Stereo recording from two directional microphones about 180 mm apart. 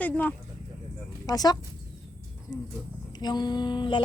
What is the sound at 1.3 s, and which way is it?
Speech, 20° left (ahead or behind).